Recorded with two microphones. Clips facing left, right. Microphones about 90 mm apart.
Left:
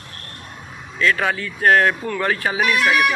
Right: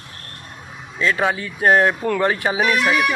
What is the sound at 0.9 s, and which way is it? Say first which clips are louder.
Speech: even; 20° right (ahead or behind).